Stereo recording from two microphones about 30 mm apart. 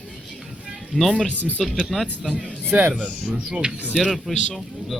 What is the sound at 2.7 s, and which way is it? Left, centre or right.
Speech, right.